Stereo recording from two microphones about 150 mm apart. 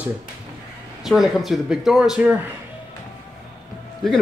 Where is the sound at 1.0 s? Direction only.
Centre (ahead or behind).